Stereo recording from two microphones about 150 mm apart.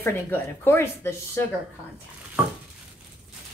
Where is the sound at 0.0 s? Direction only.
15° left (ahead or behind).